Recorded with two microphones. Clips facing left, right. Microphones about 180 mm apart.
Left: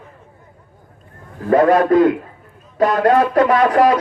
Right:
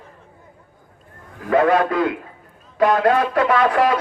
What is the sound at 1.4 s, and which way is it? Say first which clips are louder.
Speech: left 3 dB; 40° left (ahead or behind).